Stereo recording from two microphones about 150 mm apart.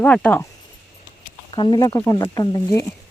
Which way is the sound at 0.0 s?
10° left (ahead or behind).